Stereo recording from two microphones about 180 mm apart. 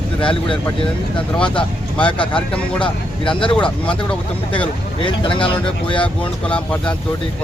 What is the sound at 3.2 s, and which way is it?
Speech, 30° left (ahead or behind).